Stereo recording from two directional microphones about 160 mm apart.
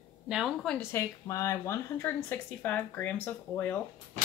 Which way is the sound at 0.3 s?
5° right (ahead or behind).